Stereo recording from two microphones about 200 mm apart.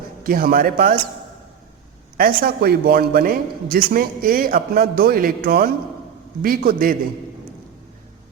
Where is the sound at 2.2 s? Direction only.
50° right (ahead or behind).